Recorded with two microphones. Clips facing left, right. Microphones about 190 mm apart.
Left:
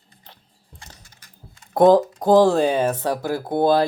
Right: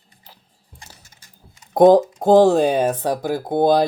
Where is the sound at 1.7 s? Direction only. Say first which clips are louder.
Right 2 dB; 20° right (ahead or behind).